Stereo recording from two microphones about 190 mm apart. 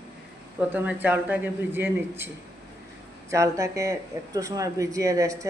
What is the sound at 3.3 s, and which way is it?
Speech, 15° right (ahead or behind).